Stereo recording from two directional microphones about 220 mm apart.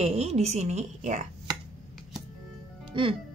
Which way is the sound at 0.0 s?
30° right (ahead or behind).